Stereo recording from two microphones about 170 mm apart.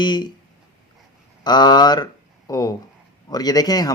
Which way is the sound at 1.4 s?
25° left (ahead or behind).